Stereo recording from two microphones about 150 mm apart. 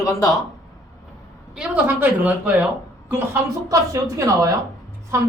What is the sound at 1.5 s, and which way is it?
Speech, 5° right (ahead or behind).